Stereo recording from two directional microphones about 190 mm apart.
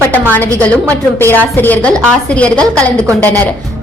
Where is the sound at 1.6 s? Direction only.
10° left (ahead or behind).